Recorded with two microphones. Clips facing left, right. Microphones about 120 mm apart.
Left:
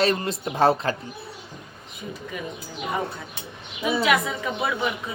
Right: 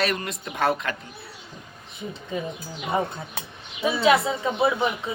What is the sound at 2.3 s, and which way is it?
Speech, 30° right (ahead or behind).